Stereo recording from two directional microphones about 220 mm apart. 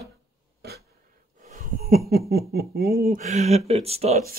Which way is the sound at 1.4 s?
40° right (ahead or behind).